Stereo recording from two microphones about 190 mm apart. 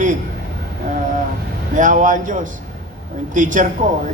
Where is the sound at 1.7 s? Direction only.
40° right (ahead or behind).